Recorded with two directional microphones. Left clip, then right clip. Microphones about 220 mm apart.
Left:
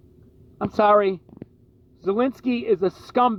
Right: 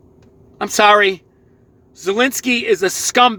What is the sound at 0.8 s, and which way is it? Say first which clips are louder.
Speech: right 6 dB; 10° right (ahead or behind).